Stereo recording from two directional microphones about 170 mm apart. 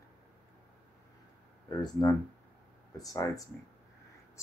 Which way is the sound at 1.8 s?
25° left (ahead or behind).